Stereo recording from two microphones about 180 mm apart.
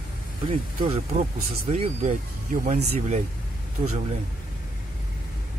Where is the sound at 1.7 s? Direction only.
35° right (ahead or behind).